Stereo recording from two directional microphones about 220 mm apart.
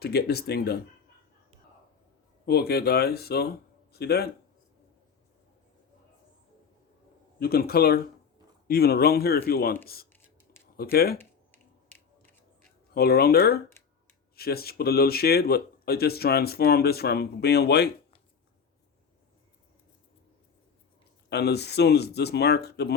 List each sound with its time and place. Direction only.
0.0 s speech: 45° left (ahead or behind)
2.5 s a man's voice: 45° left (ahead or behind)
7.3 s speech: 45° left (ahead or behind)
11.2 s a sound: 10° left (ahead or behind)
12.9 s speech: 45° left (ahead or behind)
21.2 s speech: 50° left (ahead or behind)